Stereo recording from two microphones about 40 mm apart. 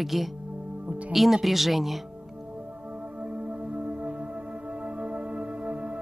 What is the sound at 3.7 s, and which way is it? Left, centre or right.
Music, right.